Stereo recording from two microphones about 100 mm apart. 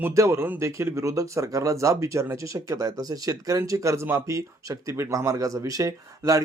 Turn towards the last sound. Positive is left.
turn(degrees=-35)  # may be behind; listen again after turning